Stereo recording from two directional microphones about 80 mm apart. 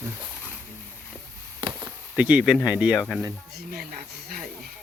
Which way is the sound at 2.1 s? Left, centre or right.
Centre.